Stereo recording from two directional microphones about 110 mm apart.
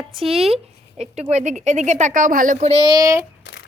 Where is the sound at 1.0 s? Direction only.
80° right.